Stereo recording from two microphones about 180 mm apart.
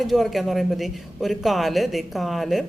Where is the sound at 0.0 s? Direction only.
Centre (ahead or behind).